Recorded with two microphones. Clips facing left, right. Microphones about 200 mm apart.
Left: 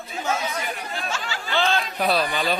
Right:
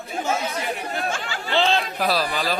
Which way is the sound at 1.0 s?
50° right (ahead or behind).